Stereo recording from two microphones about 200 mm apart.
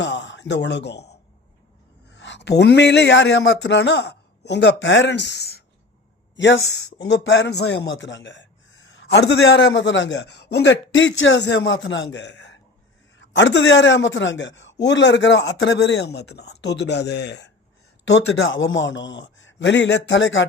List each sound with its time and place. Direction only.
0.0 s speech: 60° left (ahead or behind)
6.3 s a man's voice: 65° left (ahead or behind)
8.9 s a man's voice: 55° left (ahead or behind)